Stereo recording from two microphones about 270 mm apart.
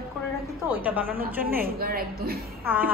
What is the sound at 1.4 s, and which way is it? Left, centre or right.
Speech, right.